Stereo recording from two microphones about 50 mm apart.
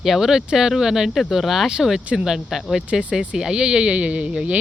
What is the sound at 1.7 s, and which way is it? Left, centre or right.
Speech, centre.